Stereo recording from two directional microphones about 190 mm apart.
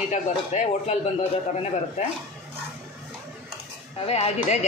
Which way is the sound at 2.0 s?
35° left (ahead or behind).